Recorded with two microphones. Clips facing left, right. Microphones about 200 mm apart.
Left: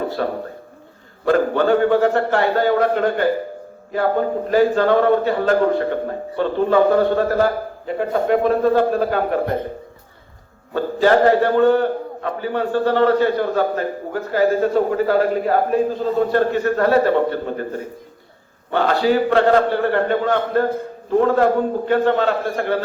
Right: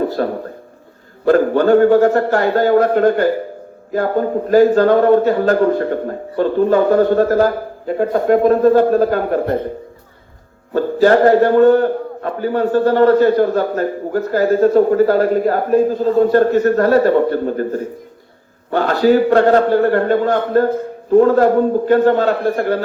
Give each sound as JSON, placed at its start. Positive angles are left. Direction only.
{"t": 0.2, "sound": "a man's voice", "side_deg": -45}
{"t": 11.0, "sound": "a man's voice", "side_deg": -45}